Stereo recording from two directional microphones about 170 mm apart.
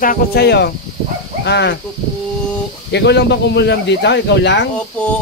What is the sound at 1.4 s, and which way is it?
Speech, 90° left.